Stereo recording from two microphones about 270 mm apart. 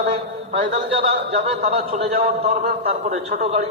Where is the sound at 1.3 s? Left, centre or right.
Right.